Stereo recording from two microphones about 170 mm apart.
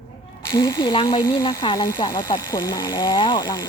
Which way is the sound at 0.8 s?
25° left (ahead or behind).